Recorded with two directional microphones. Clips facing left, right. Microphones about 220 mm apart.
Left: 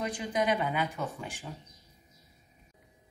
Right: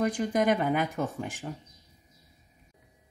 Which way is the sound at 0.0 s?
50° right (ahead or behind).